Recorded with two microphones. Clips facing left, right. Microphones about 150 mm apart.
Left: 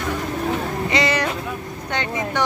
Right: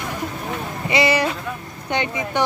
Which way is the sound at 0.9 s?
10° right (ahead or behind).